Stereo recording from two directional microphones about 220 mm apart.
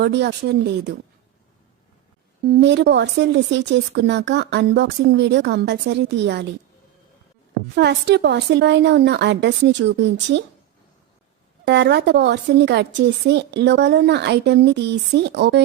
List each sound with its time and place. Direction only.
0.0 s a woman's voice: 50° right (ahead or behind)
2.5 s a woman's voice: 50° right (ahead or behind)
7.8 s a woman's voice: 50° right (ahead or behind)
11.6 s a woman's voice: 50° right (ahead or behind)